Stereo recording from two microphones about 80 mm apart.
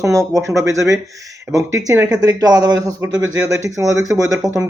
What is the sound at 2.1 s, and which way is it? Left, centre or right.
Speech, right.